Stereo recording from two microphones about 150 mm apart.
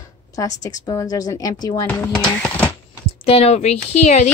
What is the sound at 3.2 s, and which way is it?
Speech, 40° left (ahead or behind).